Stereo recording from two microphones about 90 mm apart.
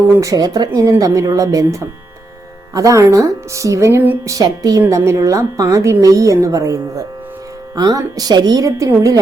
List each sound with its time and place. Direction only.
0.2 s a woman's voice: 40° right (ahead or behind)